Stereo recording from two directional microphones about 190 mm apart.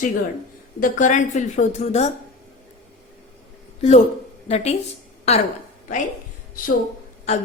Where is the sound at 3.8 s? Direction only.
35° left (ahead or behind).